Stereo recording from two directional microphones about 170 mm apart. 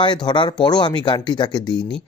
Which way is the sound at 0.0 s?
25° left (ahead or behind).